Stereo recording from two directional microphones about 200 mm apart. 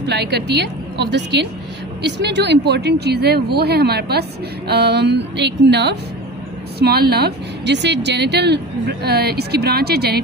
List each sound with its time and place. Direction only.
0.0 s a woman's voice: 55° right (ahead or behind)